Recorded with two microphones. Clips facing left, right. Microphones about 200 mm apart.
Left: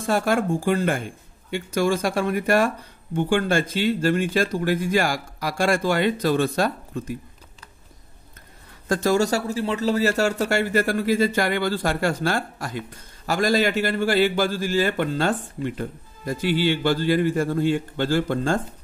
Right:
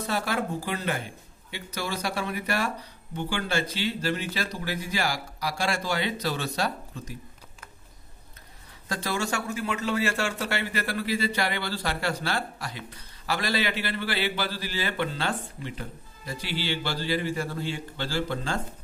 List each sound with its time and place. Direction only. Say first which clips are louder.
0.0 s speech: left 7 dB; 50° left (ahead or behind)
8.8 s speech: left 10 dB; 45° left (ahead or behind)